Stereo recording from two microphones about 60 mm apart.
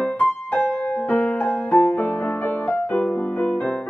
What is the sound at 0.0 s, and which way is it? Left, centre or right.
Music, left.